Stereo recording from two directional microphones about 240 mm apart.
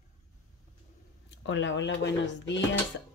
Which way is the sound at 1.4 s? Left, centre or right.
Left.